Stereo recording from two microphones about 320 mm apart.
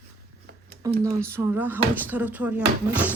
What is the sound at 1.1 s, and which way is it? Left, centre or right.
Speech, centre.